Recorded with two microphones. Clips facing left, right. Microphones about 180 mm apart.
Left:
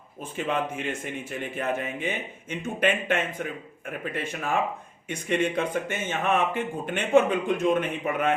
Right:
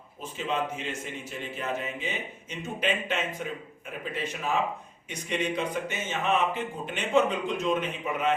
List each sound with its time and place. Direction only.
0.2 s a man's voice: 55° left (ahead or behind)